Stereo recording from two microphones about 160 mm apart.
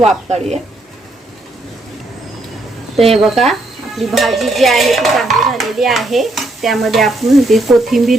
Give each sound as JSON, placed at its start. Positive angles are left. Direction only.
{"t": 0.3, "sound": "speech", "side_deg": -45}
{"t": 3.2, "sound": "stir", "side_deg": 0}